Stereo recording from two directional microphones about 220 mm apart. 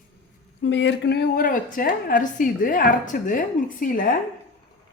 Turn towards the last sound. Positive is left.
turn(degrees=40)  # may be behind; listen again after turning